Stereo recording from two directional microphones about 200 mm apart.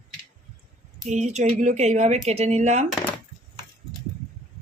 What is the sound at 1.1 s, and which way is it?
Speech, 35° right (ahead or behind).